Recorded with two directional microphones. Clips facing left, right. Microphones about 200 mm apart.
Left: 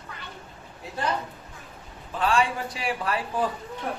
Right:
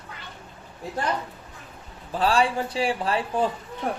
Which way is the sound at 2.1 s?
35° right (ahead or behind).